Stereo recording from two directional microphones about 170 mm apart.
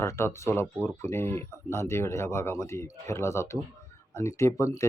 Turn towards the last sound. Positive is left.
turn(degrees=15)  # may be behind; listen again after turning